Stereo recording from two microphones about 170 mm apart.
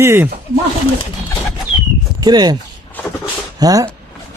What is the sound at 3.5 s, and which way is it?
Speech, 20° right (ahead or behind).